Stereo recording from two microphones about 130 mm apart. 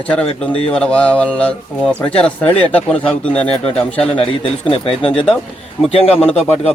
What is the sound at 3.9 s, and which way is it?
Speech, 40° left (ahead or behind).